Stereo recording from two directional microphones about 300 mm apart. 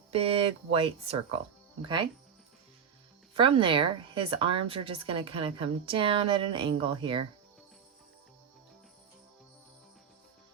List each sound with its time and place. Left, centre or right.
0.1 s speech: centre
3.3 s a woman's voice: centre